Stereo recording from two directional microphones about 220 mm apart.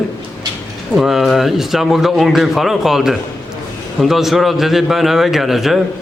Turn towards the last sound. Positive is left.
turn(degrees=0)  # may be behind; listen again after turning